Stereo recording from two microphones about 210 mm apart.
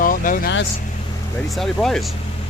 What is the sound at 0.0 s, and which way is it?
Vehicle, 40° left (ahead or behind).